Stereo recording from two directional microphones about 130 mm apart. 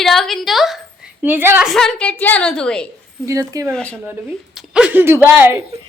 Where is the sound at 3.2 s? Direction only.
25° right (ahead or behind).